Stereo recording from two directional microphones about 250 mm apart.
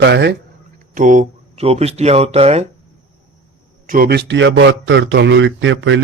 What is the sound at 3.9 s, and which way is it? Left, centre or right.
A man's voice, right.